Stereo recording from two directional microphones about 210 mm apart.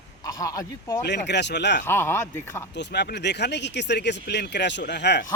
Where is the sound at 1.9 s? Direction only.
10° left (ahead or behind).